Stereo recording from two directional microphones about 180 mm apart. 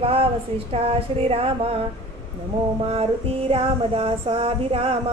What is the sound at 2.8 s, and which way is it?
Female singing, 35° right (ahead or behind).